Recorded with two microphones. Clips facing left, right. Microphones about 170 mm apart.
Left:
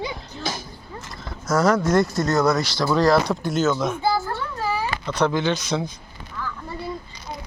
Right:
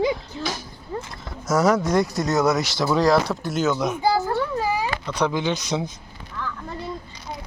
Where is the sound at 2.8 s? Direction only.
5° right (ahead or behind).